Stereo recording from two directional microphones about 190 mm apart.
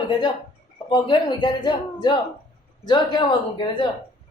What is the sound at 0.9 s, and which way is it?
Speech, 25° left (ahead or behind).